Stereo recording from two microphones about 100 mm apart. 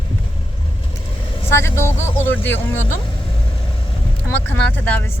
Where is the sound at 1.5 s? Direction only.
25° left (ahead or behind).